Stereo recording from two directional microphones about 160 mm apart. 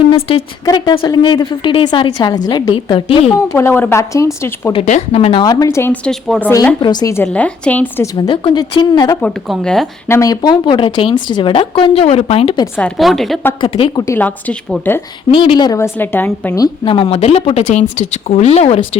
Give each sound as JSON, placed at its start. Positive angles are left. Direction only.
{"t": 0.1, "sound": "a woman's voice", "side_deg": 35}
{"t": 3.3, "sound": "speech", "side_deg": 15}
{"t": 4.7, "sound": "speech", "side_deg": 40}
{"t": 6.1, "sound": "speech", "side_deg": 5}
{"t": 6.7, "sound": "a woman's voice", "side_deg": 25}
{"t": 7.3, "sound": "speech", "side_deg": 5}
{"t": 8.0, "sound": "a woman's voice", "side_deg": 25}
{"t": 9.5, "sound": "speech", "side_deg": 0}
{"t": 10.1, "sound": "speech", "side_deg": 20}
{"t": 13.0, "sound": "speech", "side_deg": 0}
{"t": 13.6, "sound": "speech", "side_deg": 30}
{"t": 14.1, "sound": "speech", "side_deg": 10}
{"t": 15.3, "sound": "speech", "side_deg": 30}
{"t": 16.6, "sound": "speech", "side_deg": 30}